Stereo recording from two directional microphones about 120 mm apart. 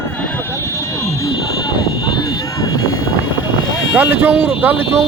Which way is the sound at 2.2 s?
30° left (ahead or behind).